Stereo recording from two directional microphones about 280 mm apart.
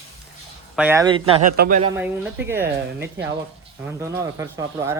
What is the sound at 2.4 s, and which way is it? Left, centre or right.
Speech, centre.